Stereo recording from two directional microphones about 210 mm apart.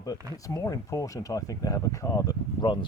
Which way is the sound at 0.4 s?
15° left (ahead or behind).